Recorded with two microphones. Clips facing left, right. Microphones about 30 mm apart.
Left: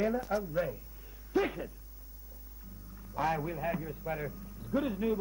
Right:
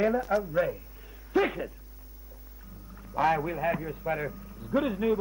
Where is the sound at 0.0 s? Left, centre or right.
Right.